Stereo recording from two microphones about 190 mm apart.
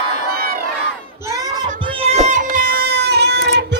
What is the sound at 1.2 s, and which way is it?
Crowd, 20° right (ahead or behind).